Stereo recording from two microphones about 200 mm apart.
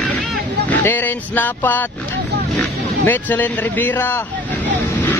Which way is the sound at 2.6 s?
10° left (ahead or behind).